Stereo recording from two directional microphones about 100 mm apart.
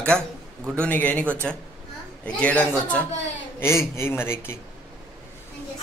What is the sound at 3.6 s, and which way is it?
Speech, 25° left (ahead or behind).